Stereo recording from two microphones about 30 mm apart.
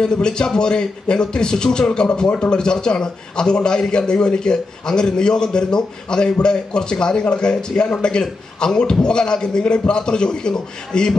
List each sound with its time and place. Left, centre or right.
0.0 s a man's voice: left